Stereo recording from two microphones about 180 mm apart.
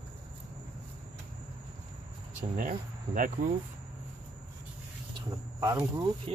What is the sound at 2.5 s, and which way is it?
Speech, 50° right (ahead or behind).